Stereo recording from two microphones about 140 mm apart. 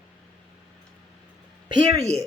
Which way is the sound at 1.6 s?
35° right (ahead or behind).